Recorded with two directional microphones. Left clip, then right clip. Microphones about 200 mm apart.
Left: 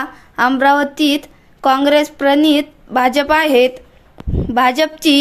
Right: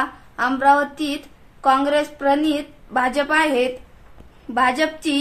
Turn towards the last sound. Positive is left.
turn(degrees=45)  # may be behind; listen again after turning